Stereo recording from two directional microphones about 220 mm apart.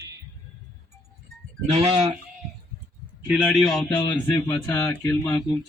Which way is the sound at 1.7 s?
25° right (ahead or behind).